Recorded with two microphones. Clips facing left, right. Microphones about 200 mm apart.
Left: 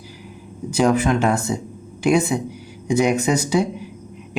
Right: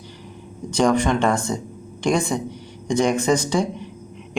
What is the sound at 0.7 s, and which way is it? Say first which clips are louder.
Speech: left 1 dB; 5° left (ahead or behind).